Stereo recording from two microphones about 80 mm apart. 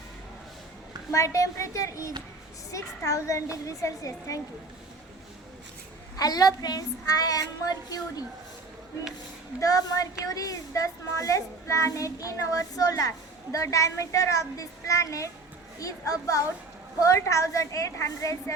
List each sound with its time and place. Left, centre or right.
1.1 s a woman's voice: left
6.1 s a child's voice: left
9.6 s a child's voice: left